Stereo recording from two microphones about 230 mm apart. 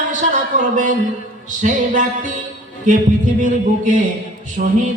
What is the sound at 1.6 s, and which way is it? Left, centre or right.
Speech, right.